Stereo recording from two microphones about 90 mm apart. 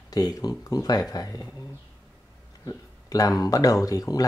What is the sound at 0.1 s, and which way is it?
Speech, 45° left (ahead or behind).